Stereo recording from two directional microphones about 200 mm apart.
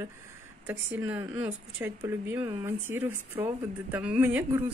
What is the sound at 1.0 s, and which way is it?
Speech, 10° right (ahead or behind).